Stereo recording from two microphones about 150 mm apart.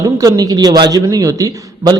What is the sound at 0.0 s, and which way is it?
A man's voice, 25° right (ahead or behind).